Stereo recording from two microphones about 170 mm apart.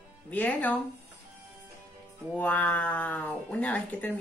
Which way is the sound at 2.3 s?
10° left (ahead or behind).